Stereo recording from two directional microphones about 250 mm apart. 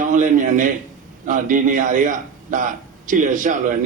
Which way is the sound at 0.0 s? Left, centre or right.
Right.